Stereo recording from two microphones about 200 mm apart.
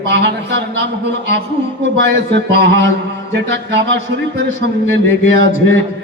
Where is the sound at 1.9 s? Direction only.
60° right (ahead or behind).